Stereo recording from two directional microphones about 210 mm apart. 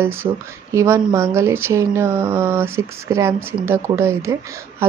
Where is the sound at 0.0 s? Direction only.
10° right (ahead or behind).